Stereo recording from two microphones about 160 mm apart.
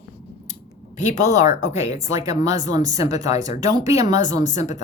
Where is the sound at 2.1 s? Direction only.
20° right (ahead or behind).